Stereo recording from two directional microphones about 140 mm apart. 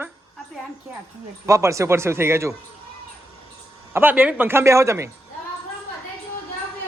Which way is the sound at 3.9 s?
15° right (ahead or behind).